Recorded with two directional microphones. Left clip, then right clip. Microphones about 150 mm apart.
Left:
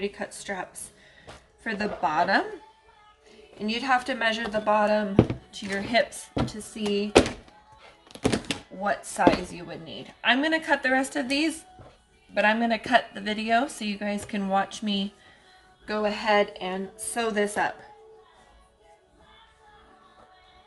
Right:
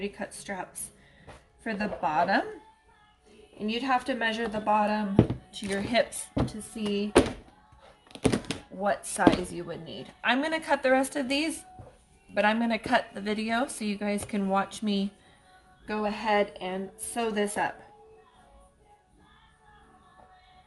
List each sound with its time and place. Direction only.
0.0 s a woman's voice: centre (ahead or behind)
3.6 s a woman's voice: 10° left (ahead or behind)
5.5 s speech: 15° right (ahead or behind)
6.3 s a woman's voice: 5° right (ahead or behind)
8.0 s music: 10° right (ahead or behind)
8.8 s speech: 15° right (ahead or behind)
9.2 s a woman's voice: 30° right (ahead or behind)
15.9 s a woman's voice: centre (ahead or behind)